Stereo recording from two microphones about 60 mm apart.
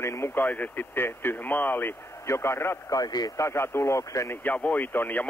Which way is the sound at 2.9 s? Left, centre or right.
Left.